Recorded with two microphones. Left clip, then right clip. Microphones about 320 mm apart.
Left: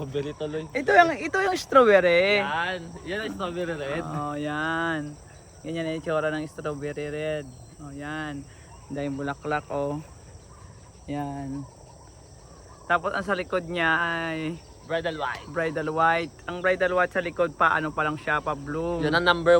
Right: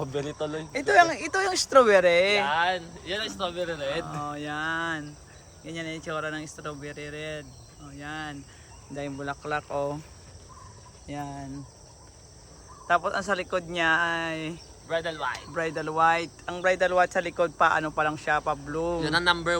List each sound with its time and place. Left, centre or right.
0.0 s speech: centre
0.7 s speech: centre
11.0 s cricket: centre
12.9 s speech: centre